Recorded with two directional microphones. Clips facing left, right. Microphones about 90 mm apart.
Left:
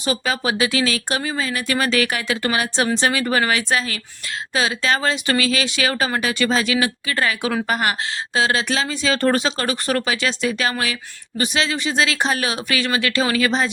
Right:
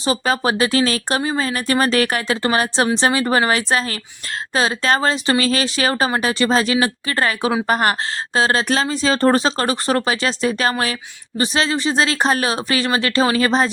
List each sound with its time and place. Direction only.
0.0 s speech: 35° right (ahead or behind)